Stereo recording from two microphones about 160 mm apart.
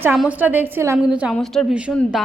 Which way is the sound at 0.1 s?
5° right (ahead or behind).